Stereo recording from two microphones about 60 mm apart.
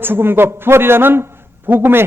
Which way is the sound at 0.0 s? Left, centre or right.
Right.